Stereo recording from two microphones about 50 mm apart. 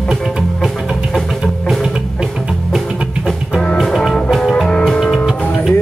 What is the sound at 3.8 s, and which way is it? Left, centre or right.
Music, centre.